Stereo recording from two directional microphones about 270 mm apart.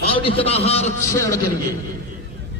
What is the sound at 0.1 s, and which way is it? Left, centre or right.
Speech, centre.